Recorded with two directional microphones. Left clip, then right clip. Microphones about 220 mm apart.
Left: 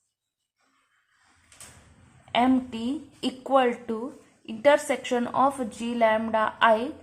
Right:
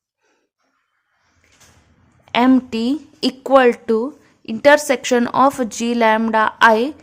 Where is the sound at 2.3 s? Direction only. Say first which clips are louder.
Right 8 dB; 50° right (ahead or behind).